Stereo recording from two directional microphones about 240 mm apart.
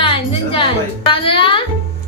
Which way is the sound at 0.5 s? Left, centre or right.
Left.